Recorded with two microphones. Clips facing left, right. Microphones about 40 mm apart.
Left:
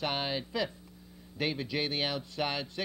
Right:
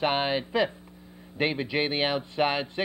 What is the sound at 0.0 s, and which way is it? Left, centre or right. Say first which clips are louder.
A man's voice: right 7 dB; right.